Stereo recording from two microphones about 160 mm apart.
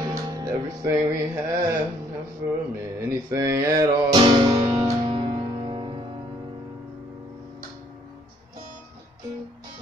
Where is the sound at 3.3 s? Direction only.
20° right (ahead or behind).